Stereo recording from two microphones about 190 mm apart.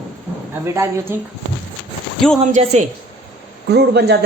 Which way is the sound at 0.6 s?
15° right (ahead or behind).